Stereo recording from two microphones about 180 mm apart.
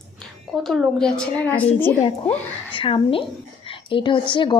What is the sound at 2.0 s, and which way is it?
A woman's voice, 30° left (ahead or behind).